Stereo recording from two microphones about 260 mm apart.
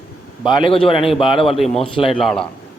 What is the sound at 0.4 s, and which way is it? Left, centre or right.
A man's voice, centre.